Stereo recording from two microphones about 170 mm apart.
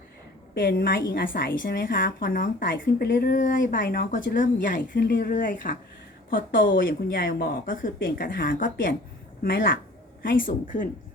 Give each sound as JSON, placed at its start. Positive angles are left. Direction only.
{"t": 0.5, "sound": "a woman's voice", "side_deg": 70}